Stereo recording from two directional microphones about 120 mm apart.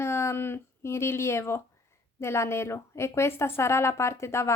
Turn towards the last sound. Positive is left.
turn(degrees=25)  # may be behind; listen again after turning